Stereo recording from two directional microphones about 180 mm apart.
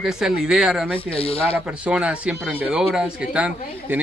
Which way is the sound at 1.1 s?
30° left (ahead or behind).